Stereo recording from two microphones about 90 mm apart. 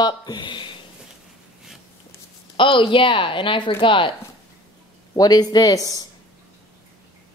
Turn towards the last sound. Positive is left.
turn(degrees=45)  # may be behind; listen again after turning